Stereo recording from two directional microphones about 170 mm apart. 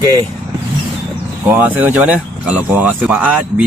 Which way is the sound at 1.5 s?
10° right (ahead or behind).